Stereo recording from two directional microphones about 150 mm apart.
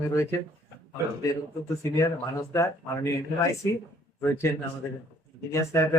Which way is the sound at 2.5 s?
20° left (ahead or behind).